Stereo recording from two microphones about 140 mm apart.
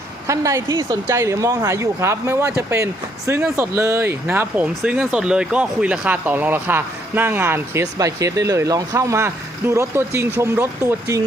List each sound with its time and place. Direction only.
0.3 s speech: 20° right (ahead or behind)